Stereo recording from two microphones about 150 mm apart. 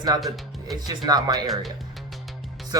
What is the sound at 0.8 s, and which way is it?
Speech, 25° right (ahead or behind).